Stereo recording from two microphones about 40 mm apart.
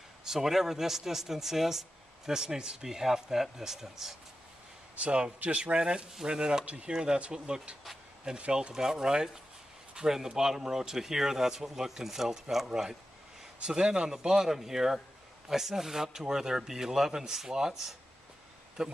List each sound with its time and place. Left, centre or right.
0.2 s speech: centre
4.9 s a man's voice: right
6.6 s speech: right
6.9 s speech: right
8.7 s speech: centre
13.6 s speech: right